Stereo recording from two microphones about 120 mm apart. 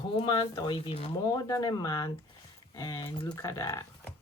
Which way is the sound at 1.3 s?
30° left (ahead or behind).